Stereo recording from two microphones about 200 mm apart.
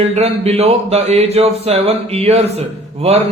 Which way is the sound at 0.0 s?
30° right (ahead or behind).